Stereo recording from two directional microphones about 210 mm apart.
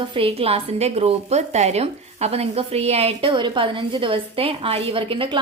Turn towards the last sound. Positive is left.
turn(degrees=-25)  # may be behind; listen again after turning